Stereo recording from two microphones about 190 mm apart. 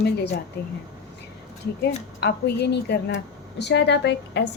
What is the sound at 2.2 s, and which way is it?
Speech, 60° left (ahead or behind).